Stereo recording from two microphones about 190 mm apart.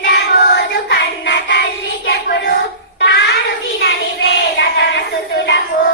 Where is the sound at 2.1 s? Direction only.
55° left (ahead or behind).